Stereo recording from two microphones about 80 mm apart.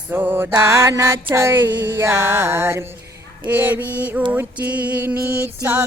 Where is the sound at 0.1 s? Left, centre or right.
Right.